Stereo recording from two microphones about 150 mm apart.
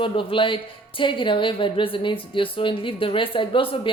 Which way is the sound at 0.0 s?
35° left (ahead or behind).